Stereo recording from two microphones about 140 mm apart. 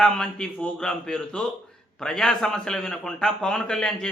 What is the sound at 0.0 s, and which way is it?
A man's voice, 5° left (ahead or behind).